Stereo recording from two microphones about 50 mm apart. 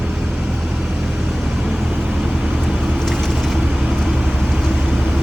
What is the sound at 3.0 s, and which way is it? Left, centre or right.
Vehicle, centre.